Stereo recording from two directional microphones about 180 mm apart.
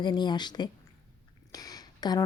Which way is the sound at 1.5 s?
20° left (ahead or behind).